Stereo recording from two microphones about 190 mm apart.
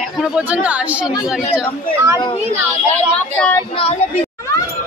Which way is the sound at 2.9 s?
10° left (ahead or behind).